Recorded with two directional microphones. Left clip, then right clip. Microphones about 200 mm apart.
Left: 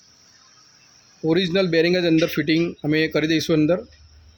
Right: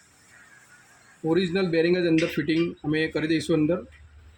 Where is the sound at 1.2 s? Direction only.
55° left (ahead or behind).